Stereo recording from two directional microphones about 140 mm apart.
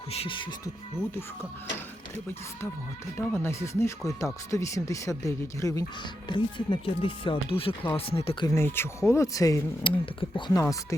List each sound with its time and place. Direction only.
0.1 s speech: 40° left (ahead or behind)
3.2 s speech: 15° left (ahead or behind)
6.2 s speech: 35° left (ahead or behind)
8.5 s speech: 15° left (ahead or behind)
9.8 s speech: 35° left (ahead or behind)
10.6 s speech: 20° left (ahead or behind)